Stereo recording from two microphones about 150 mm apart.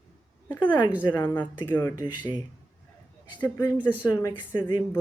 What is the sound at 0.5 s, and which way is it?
Speech, 30° left (ahead or behind).